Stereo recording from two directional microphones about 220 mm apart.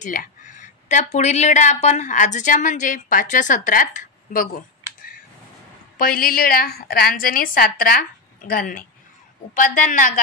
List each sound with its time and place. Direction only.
0.0 s speech: 35° left (ahead or behind)
5.9 s speech: 40° left (ahead or behind)